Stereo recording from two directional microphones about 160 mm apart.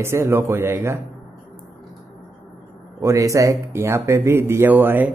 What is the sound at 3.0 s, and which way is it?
A man's voice, 20° right (ahead or behind).